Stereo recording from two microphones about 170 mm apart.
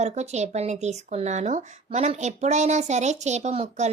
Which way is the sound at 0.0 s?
40° right (ahead or behind).